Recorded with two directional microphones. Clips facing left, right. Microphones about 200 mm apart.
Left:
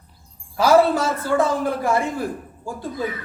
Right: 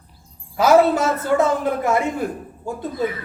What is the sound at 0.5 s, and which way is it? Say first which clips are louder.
A woman's voice: right 1 dB; 20° right (ahead or behind).